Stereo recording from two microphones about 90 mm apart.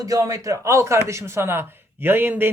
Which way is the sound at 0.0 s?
40° right (ahead or behind).